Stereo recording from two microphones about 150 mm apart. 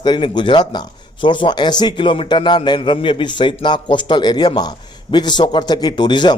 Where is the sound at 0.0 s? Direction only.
30° left (ahead or behind).